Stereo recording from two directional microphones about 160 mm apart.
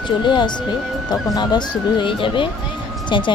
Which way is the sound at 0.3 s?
30° left (ahead or behind).